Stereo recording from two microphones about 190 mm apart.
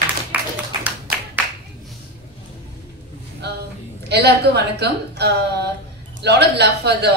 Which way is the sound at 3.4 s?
60° right (ahead or behind).